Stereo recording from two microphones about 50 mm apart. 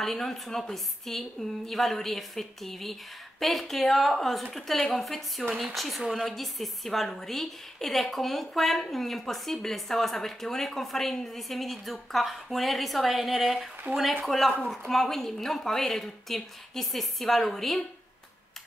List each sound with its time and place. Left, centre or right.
0.0 s a woman's voice: centre
13.9 s speech: right
14.2 s a woman's voice: centre